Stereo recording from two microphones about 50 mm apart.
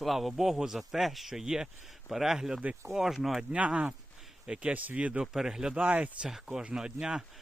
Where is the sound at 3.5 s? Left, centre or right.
Right.